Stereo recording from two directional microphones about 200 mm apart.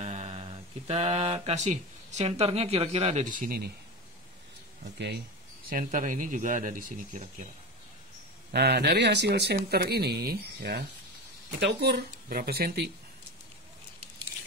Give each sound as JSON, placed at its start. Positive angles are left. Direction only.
{"t": 0.0, "sound": "speech", "side_deg": -35}
{"t": 4.9, "sound": "speech", "side_deg": -60}
{"t": 5.7, "sound": "speech", "side_deg": -40}
{"t": 8.5, "sound": "speech", "side_deg": -55}